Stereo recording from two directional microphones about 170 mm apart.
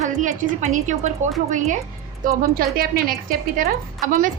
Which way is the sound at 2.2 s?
55° right (ahead or behind).